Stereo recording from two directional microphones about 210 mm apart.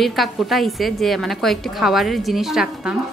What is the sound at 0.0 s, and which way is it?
Speech, centre (ahead or behind).